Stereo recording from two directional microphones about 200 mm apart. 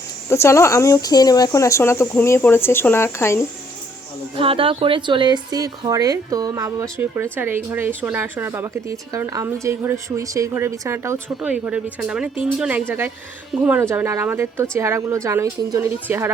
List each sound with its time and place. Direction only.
0.3 s speech: 15° left (ahead or behind)
4.4 s a woman's voice: 25° right (ahead or behind); by 16.3 s 10° right (ahead or behind)